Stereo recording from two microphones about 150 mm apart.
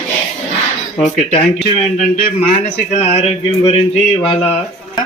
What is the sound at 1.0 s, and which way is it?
Speech, 40° left (ahead or behind).